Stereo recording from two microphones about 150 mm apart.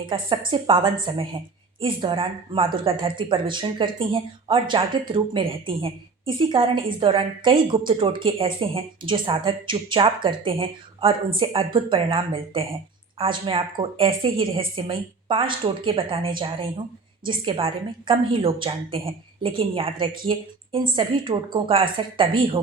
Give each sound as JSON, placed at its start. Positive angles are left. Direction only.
{"t": 0.0, "sound": "speech", "side_deg": -30}